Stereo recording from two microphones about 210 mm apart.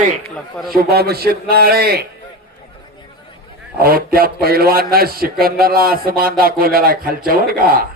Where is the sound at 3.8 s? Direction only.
45° right (ahead or behind).